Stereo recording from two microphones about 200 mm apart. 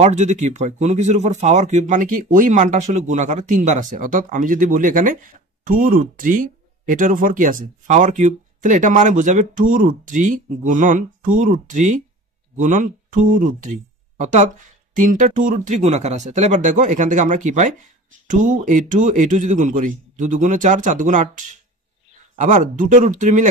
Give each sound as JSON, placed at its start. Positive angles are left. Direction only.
{"t": 0.0, "sound": "speech", "side_deg": -35}